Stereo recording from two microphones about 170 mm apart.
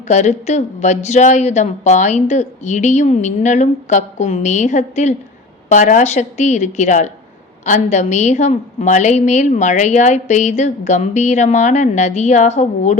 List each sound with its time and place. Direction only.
0.1 s a woman's voice: 45° left (ahead or behind)